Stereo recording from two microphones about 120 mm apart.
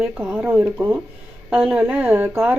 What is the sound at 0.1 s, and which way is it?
Speech, 10° right (ahead or behind).